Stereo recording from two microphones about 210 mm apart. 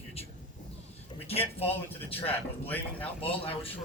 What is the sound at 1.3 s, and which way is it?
A man's voice, 30° left (ahead or behind).